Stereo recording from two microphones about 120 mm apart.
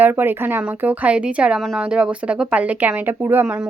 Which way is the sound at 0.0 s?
15° right (ahead or behind).